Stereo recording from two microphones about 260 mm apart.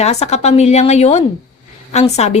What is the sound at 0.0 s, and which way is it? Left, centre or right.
Speech, left.